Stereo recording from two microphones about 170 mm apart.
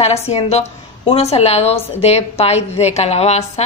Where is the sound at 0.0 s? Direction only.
40° left (ahead or behind).